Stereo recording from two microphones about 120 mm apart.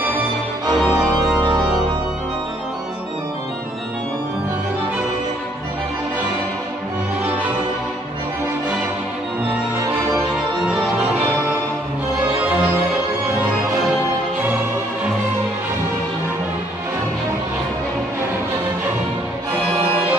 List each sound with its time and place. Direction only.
0.8 s organ: 20° right (ahead or behind)